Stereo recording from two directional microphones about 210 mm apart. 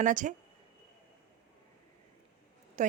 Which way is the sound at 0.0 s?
35° right (ahead or behind).